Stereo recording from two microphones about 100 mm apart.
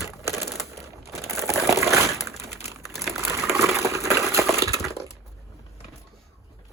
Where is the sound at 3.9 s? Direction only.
30° right (ahead or behind).